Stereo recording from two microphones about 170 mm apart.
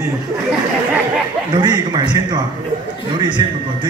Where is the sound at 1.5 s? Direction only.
25° right (ahead or behind).